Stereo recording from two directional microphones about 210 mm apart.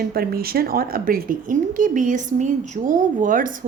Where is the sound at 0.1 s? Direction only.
45° right (ahead or behind).